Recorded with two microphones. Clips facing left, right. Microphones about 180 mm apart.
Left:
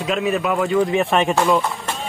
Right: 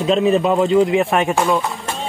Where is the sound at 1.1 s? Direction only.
5° right (ahead or behind).